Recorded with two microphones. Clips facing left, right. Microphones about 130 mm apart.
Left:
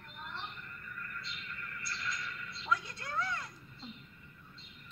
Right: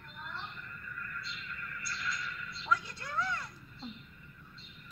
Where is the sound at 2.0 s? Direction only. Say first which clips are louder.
Right 2 dB; 30° left (ahead or behind).